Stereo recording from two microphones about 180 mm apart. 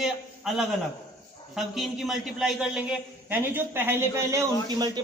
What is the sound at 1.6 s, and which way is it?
A man's voice, centre (ahead or behind).